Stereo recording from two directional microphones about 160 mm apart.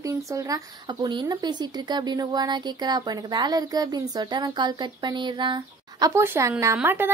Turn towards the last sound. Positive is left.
turn(degrees=-15)  # may be behind; listen again after turning